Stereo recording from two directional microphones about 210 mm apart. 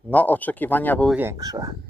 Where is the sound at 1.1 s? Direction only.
15° right (ahead or behind).